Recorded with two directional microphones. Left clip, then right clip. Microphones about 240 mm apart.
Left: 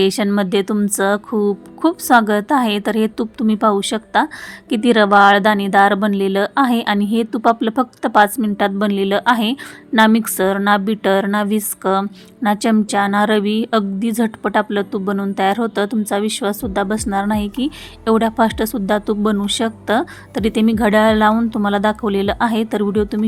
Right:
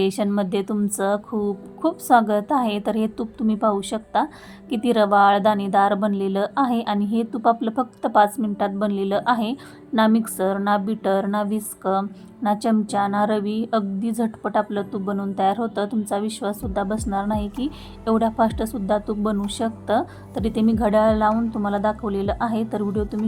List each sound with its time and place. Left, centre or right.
0.0 s a woman's voice: centre